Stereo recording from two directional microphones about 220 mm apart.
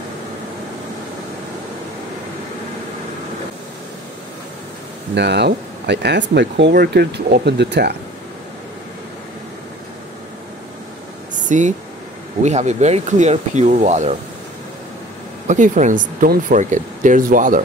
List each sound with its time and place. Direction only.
5.1 s speech: 50° right (ahead or behind)
11.3 s a sound: 35° right (ahead or behind)
12.4 s speech: 30° right (ahead or behind)
15.4 s speech: 35° right (ahead or behind)